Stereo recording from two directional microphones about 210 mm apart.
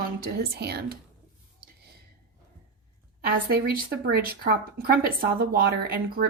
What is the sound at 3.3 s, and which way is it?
Speech, 45° right (ahead or behind).